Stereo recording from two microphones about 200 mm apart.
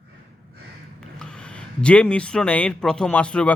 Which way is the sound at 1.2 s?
5° left (ahead or behind).